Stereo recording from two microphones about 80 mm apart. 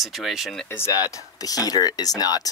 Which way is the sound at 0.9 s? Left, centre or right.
Left.